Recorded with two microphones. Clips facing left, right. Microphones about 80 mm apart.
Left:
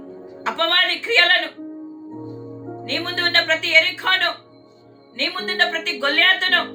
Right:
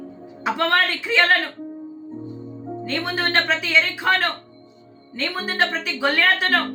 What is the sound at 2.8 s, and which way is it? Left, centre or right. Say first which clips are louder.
A woman's voice: even; centre.